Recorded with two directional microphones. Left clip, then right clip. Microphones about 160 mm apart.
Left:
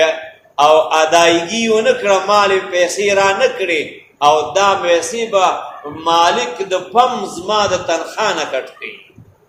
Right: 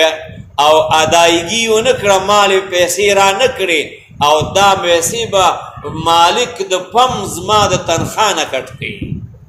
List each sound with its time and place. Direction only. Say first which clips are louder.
0.5 s mantra: right 1 dB; 55° right (ahead or behind)